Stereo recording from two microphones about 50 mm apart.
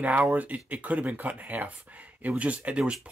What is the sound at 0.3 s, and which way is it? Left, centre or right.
Speech, right.